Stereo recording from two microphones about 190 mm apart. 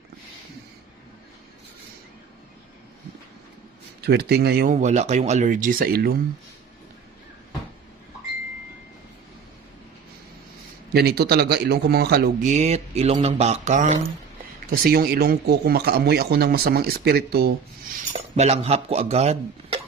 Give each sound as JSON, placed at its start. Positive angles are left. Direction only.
{"t": 4.0, "sound": "speech", "side_deg": -60}
{"t": 4.7, "sound": "speech", "side_deg": -40}
{"t": 10.9, "sound": "speech", "side_deg": -55}
{"t": 12.5, "sound": "speech", "side_deg": -35}
{"t": 14.7, "sound": "speech", "side_deg": -55}
{"t": 18.1, "sound": "speech", "side_deg": -35}